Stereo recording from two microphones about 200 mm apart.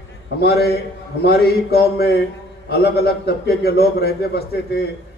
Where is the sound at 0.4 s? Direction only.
50° left (ahead or behind).